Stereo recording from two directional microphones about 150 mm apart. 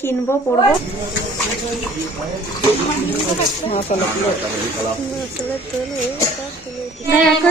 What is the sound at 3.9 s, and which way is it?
Speech, 55° left (ahead or behind).